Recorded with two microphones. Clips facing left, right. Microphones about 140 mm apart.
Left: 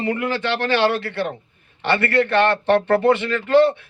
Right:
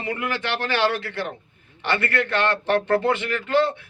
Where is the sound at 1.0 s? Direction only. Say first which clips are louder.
Left 5 dB; 15° right (ahead or behind).